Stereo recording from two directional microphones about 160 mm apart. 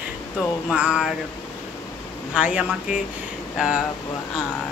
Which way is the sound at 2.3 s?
5° right (ahead or behind).